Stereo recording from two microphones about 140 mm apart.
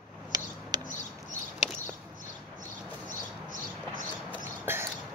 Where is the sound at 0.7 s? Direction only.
30° right (ahead or behind).